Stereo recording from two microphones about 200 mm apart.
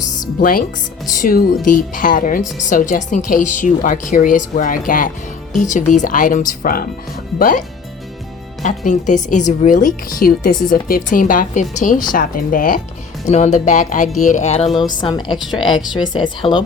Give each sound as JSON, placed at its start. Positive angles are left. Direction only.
{"t": 0.3, "sound": "a woman's voice", "side_deg": 45}
{"t": 8.6, "sound": "a woman's voice", "side_deg": 40}